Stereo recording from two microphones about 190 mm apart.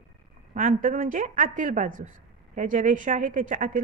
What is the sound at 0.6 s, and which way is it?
A woman's voice, 45° right (ahead or behind).